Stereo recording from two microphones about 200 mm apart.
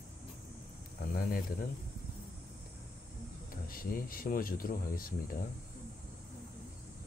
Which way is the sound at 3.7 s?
45° left (ahead or behind).